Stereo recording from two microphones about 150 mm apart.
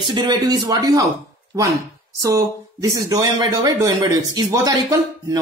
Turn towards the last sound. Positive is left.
turn(degrees=-25)  # may be behind; listen again after turning